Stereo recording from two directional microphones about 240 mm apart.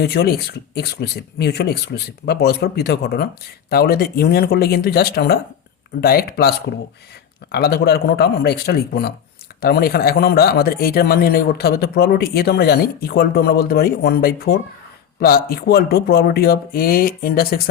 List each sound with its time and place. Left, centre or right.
0.0 s a man's voice: left
7.5 s a man's voice: left